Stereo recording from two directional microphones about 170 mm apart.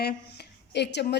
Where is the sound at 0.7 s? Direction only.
85° left.